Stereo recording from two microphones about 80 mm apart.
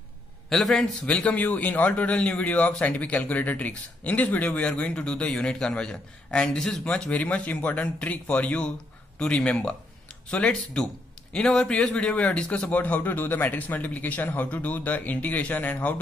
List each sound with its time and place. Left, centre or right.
0.5 s a man's voice: centre
1.0 s a man's voice: centre